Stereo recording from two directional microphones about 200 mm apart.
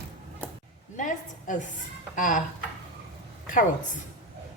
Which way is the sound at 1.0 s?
40° left (ahead or behind).